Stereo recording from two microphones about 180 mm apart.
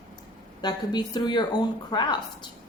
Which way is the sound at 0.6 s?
25° left (ahead or behind).